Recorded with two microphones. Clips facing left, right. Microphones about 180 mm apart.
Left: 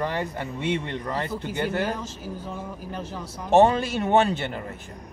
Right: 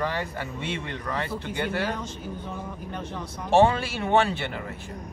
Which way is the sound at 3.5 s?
20° left (ahead or behind).